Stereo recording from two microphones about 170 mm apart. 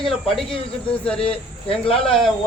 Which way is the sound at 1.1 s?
35° left (ahead or behind).